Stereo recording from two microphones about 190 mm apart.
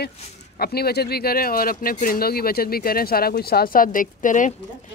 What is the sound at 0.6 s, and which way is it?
Speech, 55° left (ahead or behind).